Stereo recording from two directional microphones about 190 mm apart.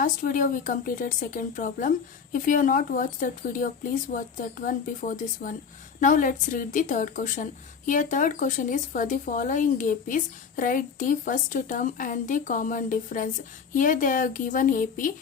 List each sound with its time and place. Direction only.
0.0 s speech: 45° left (ahead or behind)